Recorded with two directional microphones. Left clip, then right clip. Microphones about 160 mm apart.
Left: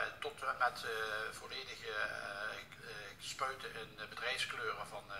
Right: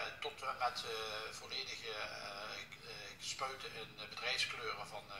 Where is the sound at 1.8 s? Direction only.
15° left (ahead or behind).